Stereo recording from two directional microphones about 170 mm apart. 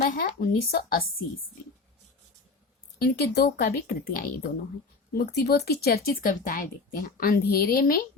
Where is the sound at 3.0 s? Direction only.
65° left (ahead or behind).